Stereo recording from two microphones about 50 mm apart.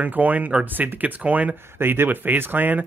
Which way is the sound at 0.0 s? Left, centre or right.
Right.